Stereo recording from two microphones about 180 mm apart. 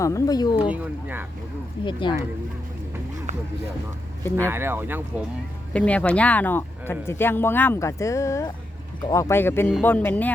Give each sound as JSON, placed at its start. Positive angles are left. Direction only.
{"t": 0.0, "sound": "speech", "side_deg": 20}
{"t": 0.7, "sound": "speech", "side_deg": -10}
{"t": 1.8, "sound": "speech", "side_deg": 25}
{"t": 4.4, "sound": "speech", "side_deg": -15}
{"t": 5.7, "sound": "speech", "side_deg": 5}